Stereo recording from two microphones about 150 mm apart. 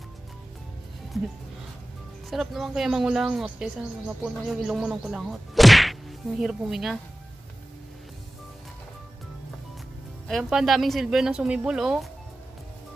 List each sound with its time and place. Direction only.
2.2 s speech: centre (ahead or behind)
4.2 s whack: centre (ahead or behind)
10.2 s speech: centre (ahead or behind)